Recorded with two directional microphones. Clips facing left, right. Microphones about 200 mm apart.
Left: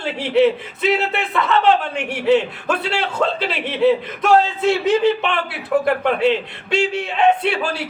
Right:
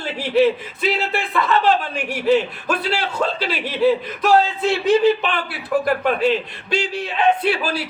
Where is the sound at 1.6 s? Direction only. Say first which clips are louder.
Left 2 dB; 25° left (ahead or behind).